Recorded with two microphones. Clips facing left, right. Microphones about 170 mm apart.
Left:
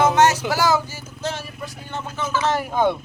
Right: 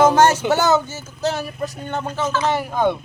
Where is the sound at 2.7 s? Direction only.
Centre (ahead or behind).